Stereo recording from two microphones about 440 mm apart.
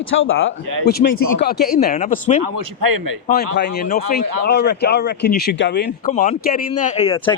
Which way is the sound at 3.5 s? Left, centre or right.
Left.